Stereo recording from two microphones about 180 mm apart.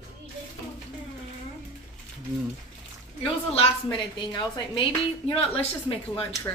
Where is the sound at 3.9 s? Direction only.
30° left (ahead or behind).